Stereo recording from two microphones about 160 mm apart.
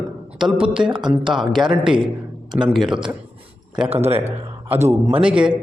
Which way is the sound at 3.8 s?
40° right (ahead or behind).